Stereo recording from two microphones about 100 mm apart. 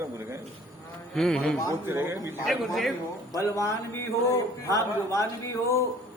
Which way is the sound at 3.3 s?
30° left (ahead or behind).